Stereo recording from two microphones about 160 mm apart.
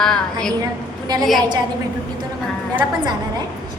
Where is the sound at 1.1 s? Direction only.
25° right (ahead or behind).